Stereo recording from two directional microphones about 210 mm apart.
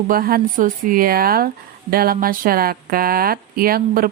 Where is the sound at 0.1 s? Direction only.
45° right (ahead or behind).